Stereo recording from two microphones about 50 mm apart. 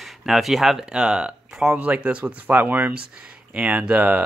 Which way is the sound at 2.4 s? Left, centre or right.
Right.